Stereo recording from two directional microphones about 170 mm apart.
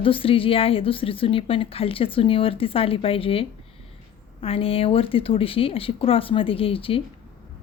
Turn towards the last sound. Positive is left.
turn(degrees=35)  # may be behind; listen again after turning